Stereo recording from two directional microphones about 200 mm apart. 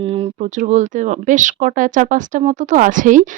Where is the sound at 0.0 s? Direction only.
25° right (ahead or behind).